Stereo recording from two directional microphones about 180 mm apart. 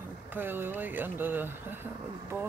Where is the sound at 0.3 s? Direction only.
10° right (ahead or behind).